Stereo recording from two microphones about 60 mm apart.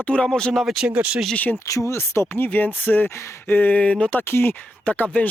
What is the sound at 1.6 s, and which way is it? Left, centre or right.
Speech, left.